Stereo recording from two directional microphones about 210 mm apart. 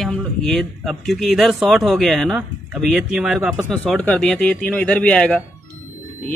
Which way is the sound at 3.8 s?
5° left (ahead or behind).